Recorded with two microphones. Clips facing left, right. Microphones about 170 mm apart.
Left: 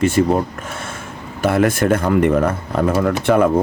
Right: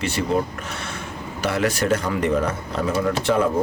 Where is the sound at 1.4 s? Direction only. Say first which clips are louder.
Left 6 dB; 50° left (ahead or behind).